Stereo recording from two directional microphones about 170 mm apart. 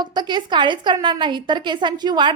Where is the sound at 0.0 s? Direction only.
25° right (ahead or behind).